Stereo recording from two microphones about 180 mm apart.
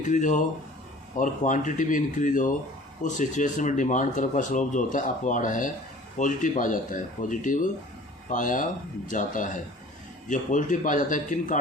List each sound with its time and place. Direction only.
0.0 s speech: 45° left (ahead or behind)